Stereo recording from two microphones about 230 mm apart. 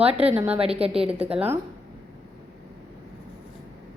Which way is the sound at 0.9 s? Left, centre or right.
Centre.